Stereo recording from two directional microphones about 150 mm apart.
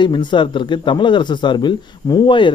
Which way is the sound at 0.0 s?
30° left (ahead or behind).